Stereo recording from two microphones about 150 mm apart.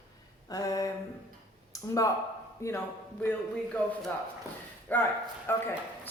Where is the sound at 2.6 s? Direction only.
15° left (ahead or behind).